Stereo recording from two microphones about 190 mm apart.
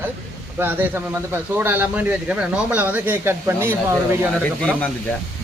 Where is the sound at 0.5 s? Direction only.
10° right (ahead or behind).